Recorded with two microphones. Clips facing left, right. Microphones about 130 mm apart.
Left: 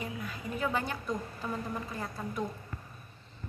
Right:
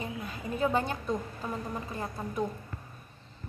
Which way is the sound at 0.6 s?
25° right (ahead or behind).